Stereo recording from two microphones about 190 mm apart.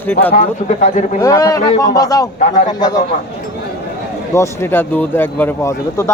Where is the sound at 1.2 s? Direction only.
15° left (ahead or behind).